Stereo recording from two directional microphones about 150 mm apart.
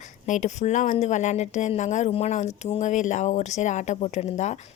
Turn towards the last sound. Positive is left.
turn(degrees=50)  # may be behind; listen again after turning